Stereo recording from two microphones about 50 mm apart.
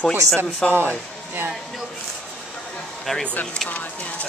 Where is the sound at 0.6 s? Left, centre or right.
Centre.